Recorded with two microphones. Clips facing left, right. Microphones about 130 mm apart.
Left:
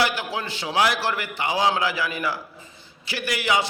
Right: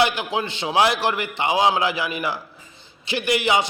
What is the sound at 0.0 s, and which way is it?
A man's voice, 20° right (ahead or behind).